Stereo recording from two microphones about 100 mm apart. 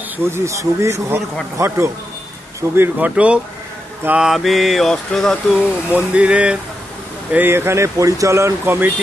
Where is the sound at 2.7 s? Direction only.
20° right (ahead or behind).